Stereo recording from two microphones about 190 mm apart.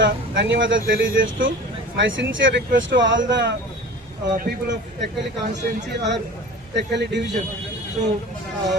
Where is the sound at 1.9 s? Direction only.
75° right (ahead or behind).